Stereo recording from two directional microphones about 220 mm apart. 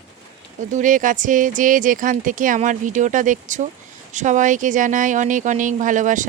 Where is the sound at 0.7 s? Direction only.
35° right (ahead or behind).